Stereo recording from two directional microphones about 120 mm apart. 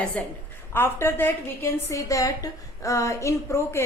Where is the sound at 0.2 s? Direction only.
15° left (ahead or behind).